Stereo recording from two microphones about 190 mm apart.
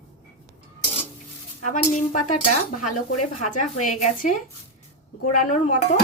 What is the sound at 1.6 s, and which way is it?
Speech, 40° left (ahead or behind).